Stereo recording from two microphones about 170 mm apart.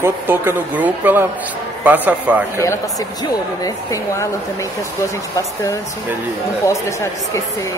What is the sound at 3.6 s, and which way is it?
Speech, 20° left (ahead or behind).